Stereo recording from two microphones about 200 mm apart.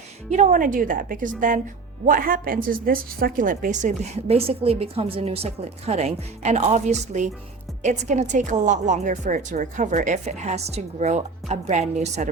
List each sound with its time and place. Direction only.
0.3 s a woman's voice: 40° right (ahead or behind)